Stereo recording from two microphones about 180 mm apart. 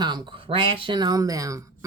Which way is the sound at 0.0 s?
25° right (ahead or behind).